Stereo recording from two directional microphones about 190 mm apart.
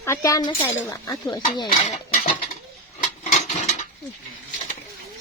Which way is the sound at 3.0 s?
40° left (ahead or behind).